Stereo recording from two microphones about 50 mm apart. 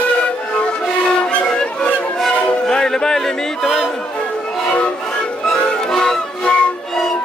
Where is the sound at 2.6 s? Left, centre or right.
Centre.